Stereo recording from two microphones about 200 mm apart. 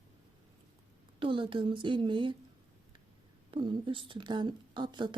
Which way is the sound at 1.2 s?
25° right (ahead or behind).